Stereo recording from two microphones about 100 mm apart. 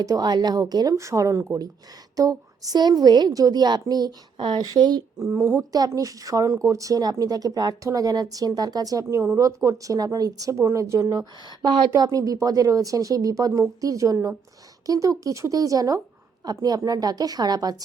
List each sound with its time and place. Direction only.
0.0 s speech: 40° right (ahead or behind)
5.2 s a woman's voice: 25° right (ahead or behind)
5.7 s speech: 35° right (ahead or behind)
11.9 s speech: 40° right (ahead or behind)